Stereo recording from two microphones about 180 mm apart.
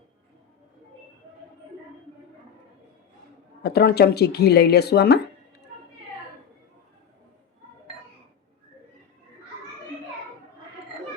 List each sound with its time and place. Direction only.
3.6 s speech: 60° left (ahead or behind)